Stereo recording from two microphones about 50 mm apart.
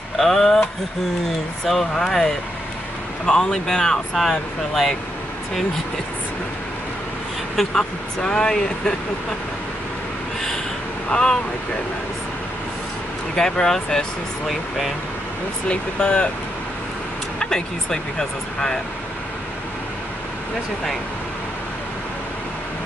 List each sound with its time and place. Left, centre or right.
0.2 s speech: centre
1.7 s speech: centre
3.6 s speech: centre
7.5 s speech: centre
11.1 s speech: centre
13.4 s speech: centre
15.7 s speech: left
17.4 s speech: centre